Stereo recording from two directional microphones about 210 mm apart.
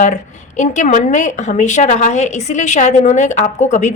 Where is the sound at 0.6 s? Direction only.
35° left (ahead or behind).